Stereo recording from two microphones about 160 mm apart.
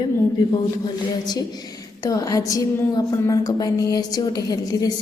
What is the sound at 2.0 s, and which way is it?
A woman's voice, 20° left (ahead or behind).